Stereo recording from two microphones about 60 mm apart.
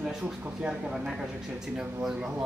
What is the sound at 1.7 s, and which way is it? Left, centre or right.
Speech, centre.